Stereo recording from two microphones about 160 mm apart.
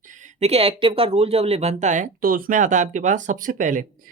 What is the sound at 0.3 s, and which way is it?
Speech, 40° right (ahead or behind).